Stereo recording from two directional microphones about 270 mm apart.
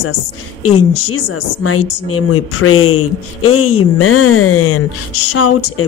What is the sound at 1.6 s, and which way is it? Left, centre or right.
Speech, left.